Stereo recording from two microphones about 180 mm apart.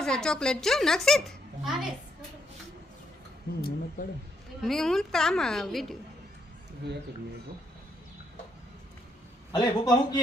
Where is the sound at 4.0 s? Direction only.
50° left (ahead or behind).